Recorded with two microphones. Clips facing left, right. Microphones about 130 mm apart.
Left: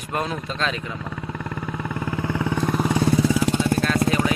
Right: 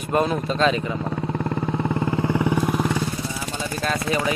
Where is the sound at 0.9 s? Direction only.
30° right (ahead or behind).